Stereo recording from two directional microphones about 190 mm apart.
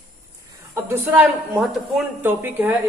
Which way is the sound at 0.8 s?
10° right (ahead or behind).